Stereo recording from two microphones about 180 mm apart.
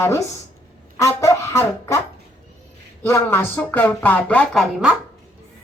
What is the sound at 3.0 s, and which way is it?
A woman's voice, 10° left (ahead or behind).